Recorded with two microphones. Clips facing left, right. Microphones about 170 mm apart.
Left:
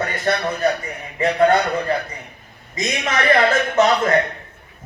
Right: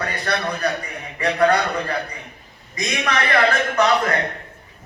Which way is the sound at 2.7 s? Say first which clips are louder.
Left 1 dB; 25° left (ahead or behind).